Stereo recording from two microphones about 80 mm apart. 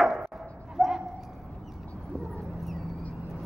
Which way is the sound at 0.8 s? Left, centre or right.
Centre.